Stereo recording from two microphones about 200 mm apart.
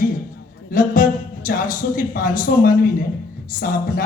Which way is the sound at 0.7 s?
40° left (ahead or behind).